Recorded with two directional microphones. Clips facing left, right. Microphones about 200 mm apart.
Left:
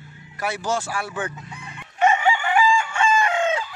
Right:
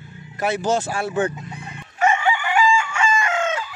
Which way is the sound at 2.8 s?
35° left (ahead or behind).